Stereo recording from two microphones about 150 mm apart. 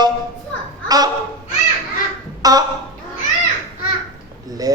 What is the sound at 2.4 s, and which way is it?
Speech, 25° right (ahead or behind).